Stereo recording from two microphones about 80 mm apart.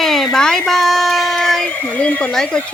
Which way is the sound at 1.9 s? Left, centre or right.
Centre.